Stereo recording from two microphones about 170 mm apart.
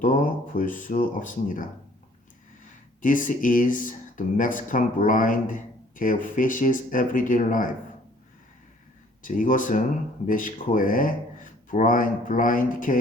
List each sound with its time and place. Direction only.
0.0 s speech: 50° left (ahead or behind)
3.0 s speech: 50° left (ahead or behind)
9.2 s speech: 50° left (ahead or behind)